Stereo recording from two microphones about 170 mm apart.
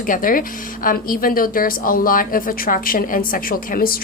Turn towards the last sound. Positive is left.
turn(degrees=60)  # may be behind; listen again after turning